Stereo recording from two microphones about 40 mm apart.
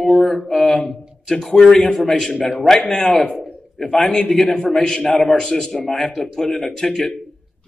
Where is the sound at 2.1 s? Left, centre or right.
Centre.